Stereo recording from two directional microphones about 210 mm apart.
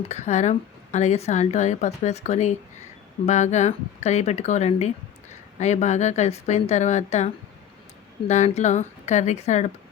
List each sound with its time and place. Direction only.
0.1 s a woman's voice: 35° left (ahead or behind)